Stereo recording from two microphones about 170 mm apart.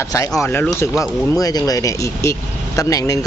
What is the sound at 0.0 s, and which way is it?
Speech, 20° left (ahead or behind).